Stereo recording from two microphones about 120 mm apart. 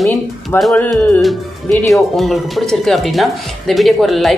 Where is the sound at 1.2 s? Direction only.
Centre (ahead or behind).